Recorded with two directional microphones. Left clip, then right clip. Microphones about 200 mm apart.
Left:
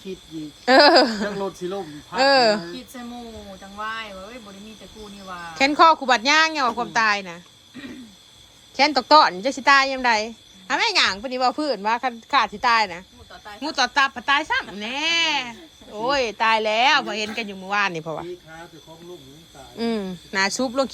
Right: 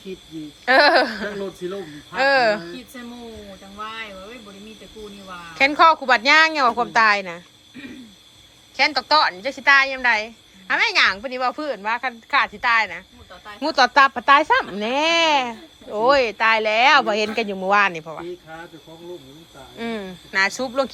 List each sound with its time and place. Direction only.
0.6 s speech: 30° left (ahead or behind)
1.4 s speech: 10° left (ahead or behind)
2.1 s a woman's voice: 25° left (ahead or behind)
3.8 s speech: 5° left (ahead or behind)
5.5 s speech: 25° left (ahead or behind)
8.7 s a woman's voice: 35° left (ahead or behind)
13.6 s speech: 10° left (ahead or behind)
17.9 s a woman's voice: 20° left (ahead or behind)
19.7 s a woman's voice: 20° left (ahead or behind)